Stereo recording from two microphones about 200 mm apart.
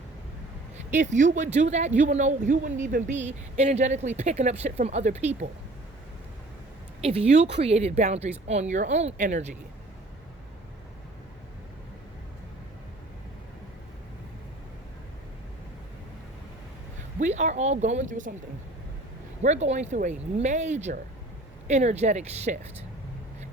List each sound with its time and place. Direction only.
0.9 s speech: 35° right (ahead or behind)
7.5 s speech: 30° right (ahead or behind)
17.2 s speech: 35° right (ahead or behind)
19.4 s speech: 35° right (ahead or behind)